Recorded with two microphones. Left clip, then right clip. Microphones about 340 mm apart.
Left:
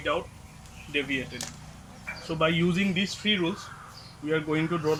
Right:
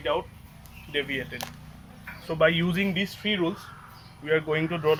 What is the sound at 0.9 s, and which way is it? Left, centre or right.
Speech, centre.